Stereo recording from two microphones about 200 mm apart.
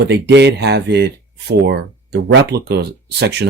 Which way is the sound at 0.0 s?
60° right (ahead or behind).